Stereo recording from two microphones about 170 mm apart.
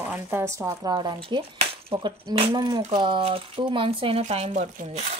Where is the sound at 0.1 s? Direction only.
15° right (ahead or behind); by 4.2 s 30° right (ahead or behind).